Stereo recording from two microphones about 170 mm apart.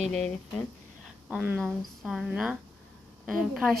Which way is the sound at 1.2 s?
5° right (ahead or behind).